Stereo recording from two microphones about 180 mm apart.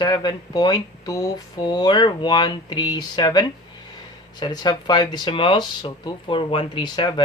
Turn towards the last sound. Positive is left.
turn(degrees=25)  # may be behind; listen again after turning